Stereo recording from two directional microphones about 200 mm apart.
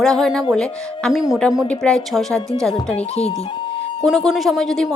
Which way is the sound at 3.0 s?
30° left (ahead or behind).